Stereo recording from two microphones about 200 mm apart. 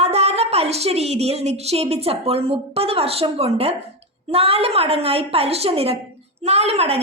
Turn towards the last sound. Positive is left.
turn(degrees=-30)  # may be behind; listen again after turning